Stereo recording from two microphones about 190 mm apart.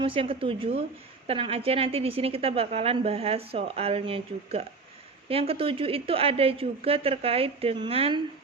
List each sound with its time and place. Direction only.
0.0 s a woman's voice: 30° right (ahead or behind)